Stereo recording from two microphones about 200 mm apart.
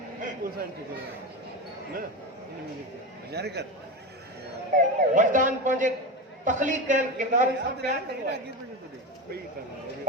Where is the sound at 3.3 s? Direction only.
55° right (ahead or behind).